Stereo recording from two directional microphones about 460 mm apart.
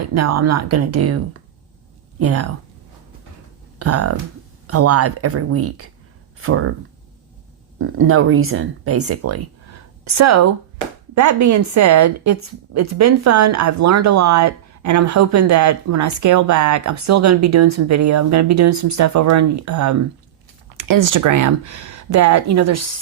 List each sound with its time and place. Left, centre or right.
0.1 s a woman's voice: right
3.8 s a woman's voice: right
7.8 s a woman's voice: right